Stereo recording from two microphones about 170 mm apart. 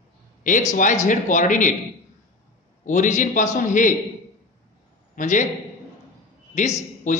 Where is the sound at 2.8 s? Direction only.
50° left (ahead or behind).